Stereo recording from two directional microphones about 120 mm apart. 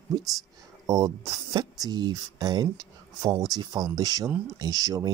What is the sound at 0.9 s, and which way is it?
Speech, 30° right (ahead or behind).